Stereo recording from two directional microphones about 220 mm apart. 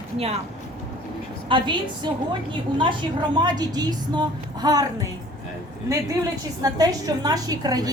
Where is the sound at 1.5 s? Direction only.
20° right (ahead or behind).